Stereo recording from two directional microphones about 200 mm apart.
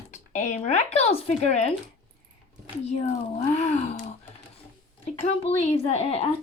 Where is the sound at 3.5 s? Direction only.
35° left (ahead or behind).